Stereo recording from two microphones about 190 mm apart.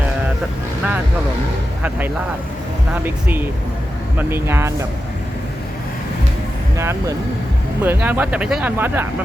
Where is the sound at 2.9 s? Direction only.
10° right (ahead or behind).